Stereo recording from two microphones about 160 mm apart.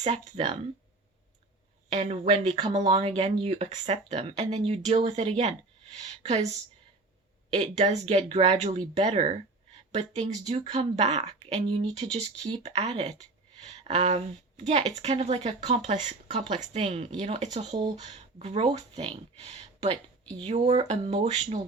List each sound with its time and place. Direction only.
0.0 s speech: 40° right (ahead or behind)
1.9 s speech: 45° right (ahead or behind)
7.5 s speech: 45° right (ahead or behind)
16.4 s speech: 30° right (ahead or behind)